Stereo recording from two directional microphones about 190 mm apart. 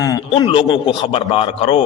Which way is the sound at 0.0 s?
20° left (ahead or behind).